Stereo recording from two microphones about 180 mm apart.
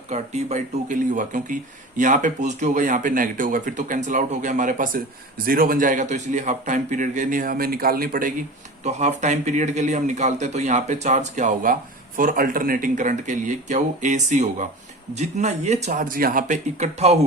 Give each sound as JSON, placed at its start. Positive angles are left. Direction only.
{"t": 0.1, "sound": "speech", "side_deg": -40}
{"t": 8.8, "sound": "a man's voice", "side_deg": -40}